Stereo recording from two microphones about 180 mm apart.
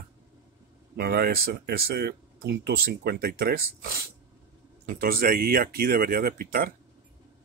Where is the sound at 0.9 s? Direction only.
60° right (ahead or behind).